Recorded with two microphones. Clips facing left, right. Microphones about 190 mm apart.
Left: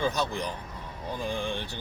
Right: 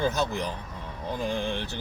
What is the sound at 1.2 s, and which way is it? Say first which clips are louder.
Speech: right 2 dB; 15° right (ahead or behind).